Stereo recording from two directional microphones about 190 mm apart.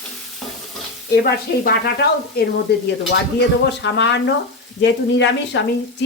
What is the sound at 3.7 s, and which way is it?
Speech, 70° left (ahead or behind).